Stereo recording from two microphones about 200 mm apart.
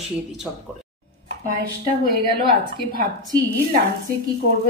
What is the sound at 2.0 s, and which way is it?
Speech, 50° right (ahead or behind).